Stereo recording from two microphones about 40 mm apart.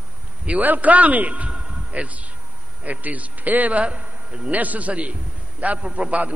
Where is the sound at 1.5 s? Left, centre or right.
Right.